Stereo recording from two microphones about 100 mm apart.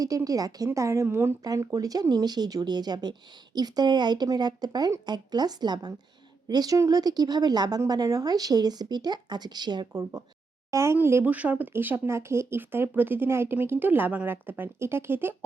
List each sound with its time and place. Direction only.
0.3 s speech: 35° right (ahead or behind)
1.5 s speech: 35° right (ahead or behind)